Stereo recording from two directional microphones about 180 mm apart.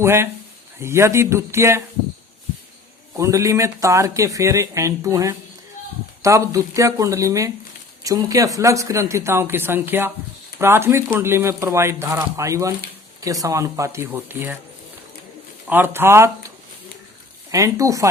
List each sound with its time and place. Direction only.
0.0 s speech: 15° right (ahead or behind)
3.2 s speech: 15° right (ahead or behind)
15.6 s speech: 10° right (ahead or behind)
17.5 s speech: 20° right (ahead or behind)